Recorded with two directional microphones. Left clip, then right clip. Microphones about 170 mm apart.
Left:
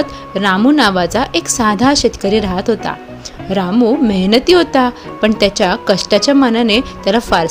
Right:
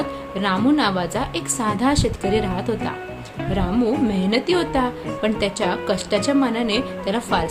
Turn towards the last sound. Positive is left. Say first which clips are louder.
# left 9 dB
turn(degrees=45)  # may be behind; listen again after turning